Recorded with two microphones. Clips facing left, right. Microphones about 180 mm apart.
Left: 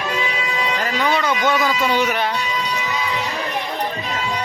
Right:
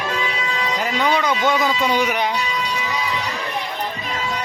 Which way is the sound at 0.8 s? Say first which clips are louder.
Right 1 dB; 15° right (ahead or behind).